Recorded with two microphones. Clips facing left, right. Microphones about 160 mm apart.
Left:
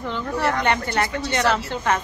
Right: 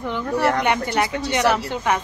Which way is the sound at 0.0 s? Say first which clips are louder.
Right 3 dB; 10° right (ahead or behind).